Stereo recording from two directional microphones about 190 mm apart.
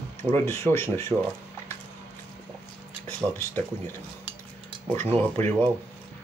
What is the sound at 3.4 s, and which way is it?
Speech, 10° left (ahead or behind).